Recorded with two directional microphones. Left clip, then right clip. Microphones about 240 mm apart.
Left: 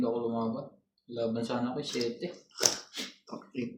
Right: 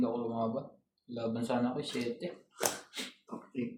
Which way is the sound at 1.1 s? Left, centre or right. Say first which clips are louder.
Left 2 dB; right.